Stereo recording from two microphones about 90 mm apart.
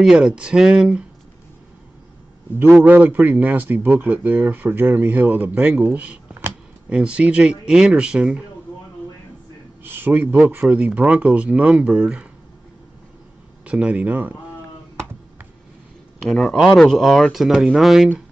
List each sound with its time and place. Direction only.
0.0 s speech: 5° right (ahead or behind)
2.8 s speech: 20° right (ahead or behind)
9.8 s a sound: 25° right (ahead or behind)
10.6 s speech: 10° right (ahead or behind)
13.7 s speech: 15° right (ahead or behind)
16.2 s speech: 5° left (ahead or behind)